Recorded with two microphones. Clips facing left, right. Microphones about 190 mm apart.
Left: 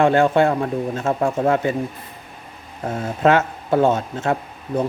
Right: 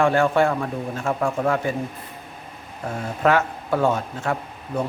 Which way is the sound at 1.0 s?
40° left (ahead or behind).